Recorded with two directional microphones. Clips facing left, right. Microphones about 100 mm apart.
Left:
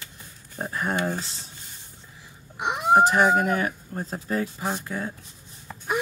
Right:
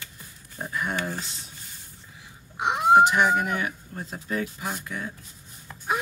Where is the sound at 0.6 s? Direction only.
35° left (ahead or behind).